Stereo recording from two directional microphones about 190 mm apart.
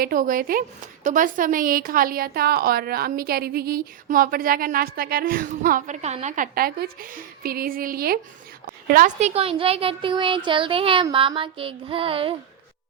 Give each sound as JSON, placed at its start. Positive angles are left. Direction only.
{"t": 0.0, "sound": "a woman's voice", "side_deg": -45}